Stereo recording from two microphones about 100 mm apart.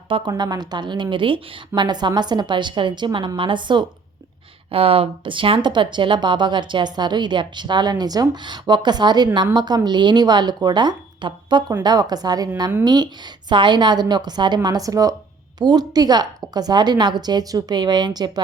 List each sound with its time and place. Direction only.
0.3 s speech: 40° right (ahead or behind)
4.7 s speech: 70° right (ahead or behind); by 18.4 s 45° right (ahead or behind)